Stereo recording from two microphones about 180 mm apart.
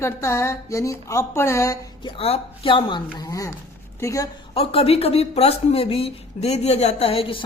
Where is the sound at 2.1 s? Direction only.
35° left (ahead or behind); by 4.3 s 15° left (ahead or behind).